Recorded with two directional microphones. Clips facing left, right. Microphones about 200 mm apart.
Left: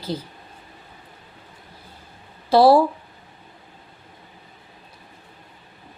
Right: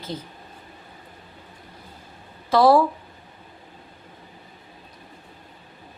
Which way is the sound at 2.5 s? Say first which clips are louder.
Left 2 dB; 30° left (ahead or behind).